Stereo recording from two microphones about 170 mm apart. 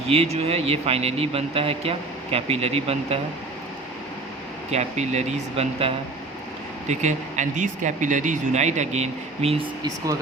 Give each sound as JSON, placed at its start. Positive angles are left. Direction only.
{"t": 0.1, "sound": "speech", "side_deg": -40}
{"t": 4.7, "sound": "speech", "side_deg": -40}